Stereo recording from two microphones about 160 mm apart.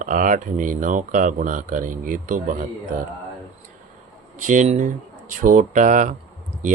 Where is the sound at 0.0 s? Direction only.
55° right (ahead or behind).